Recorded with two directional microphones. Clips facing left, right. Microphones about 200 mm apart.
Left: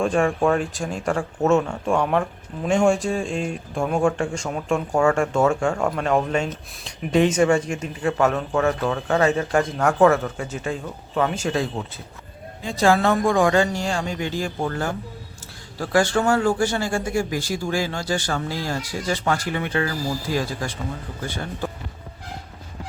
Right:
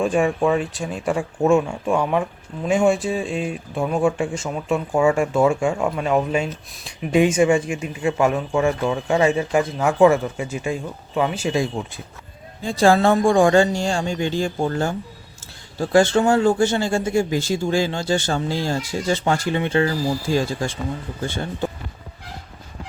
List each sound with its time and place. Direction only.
0.0 s speech: 5° right (ahead or behind)
12.6 s speech: 30° right (ahead or behind)